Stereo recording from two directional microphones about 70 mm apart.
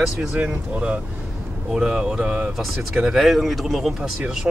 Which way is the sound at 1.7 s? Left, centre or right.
Centre.